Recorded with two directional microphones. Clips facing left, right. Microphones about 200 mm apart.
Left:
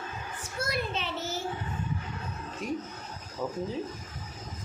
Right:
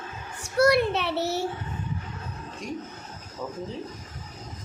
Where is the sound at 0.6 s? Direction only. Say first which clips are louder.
Right 12 dB; 75° right (ahead or behind).